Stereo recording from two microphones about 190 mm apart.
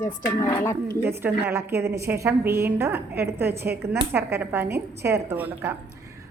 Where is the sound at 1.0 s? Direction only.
10° right (ahead or behind).